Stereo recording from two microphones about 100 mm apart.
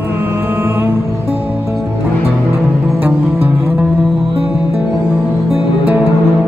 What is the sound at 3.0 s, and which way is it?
Music, 15° right (ahead or behind).